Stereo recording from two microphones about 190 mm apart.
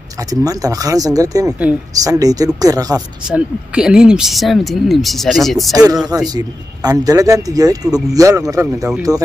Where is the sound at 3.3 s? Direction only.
5° right (ahead or behind).